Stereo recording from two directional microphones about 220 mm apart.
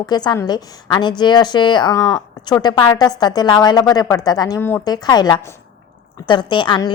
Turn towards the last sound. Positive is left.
turn(degrees=20)  # may be behind; listen again after turning